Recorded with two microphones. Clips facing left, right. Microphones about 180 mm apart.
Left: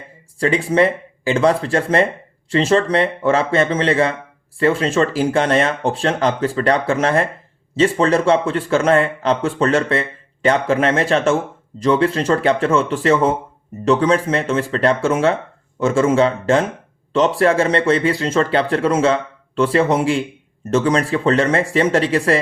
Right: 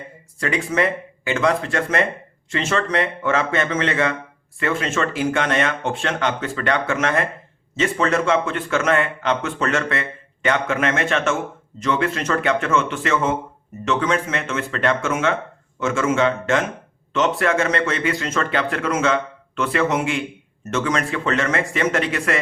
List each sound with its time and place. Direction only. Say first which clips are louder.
0.3 s a man's voice: left 6 dB; 30° left (ahead or behind)